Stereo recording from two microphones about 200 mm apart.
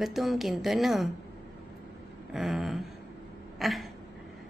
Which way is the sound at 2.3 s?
Centre (ahead or behind).